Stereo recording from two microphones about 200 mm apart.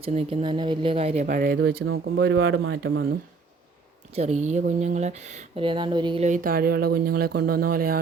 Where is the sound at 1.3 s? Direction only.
45° right (ahead or behind).